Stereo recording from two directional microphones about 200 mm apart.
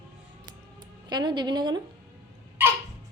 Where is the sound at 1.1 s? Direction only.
20° right (ahead or behind).